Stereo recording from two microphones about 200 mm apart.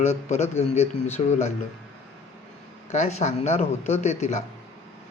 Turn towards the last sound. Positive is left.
turn(degrees=35)  # may be behind; listen again after turning